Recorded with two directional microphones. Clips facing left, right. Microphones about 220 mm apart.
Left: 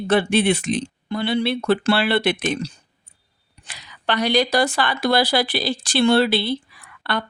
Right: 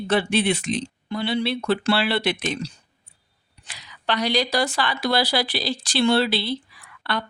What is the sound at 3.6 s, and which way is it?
Speech, 55° left (ahead or behind).